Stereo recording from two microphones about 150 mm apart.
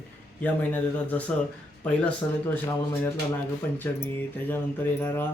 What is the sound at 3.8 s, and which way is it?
Speech, 15° left (ahead or behind).